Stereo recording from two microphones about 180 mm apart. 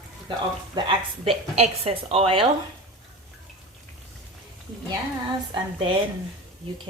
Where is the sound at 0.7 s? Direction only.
30° right (ahead or behind).